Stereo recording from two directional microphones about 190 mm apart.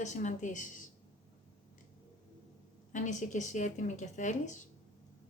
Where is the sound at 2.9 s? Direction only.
40° left (ahead or behind).